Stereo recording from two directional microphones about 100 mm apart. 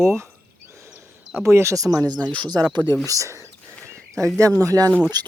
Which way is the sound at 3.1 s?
30° right (ahead or behind).